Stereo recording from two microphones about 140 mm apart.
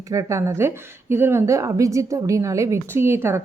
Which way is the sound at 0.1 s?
20° right (ahead or behind).